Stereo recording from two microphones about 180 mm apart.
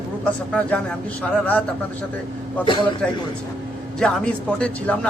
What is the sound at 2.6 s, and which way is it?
Speech, 30° left (ahead or behind).